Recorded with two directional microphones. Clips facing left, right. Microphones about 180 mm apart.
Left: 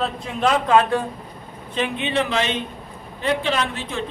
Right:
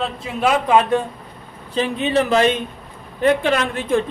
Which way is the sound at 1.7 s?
35° right (ahead or behind).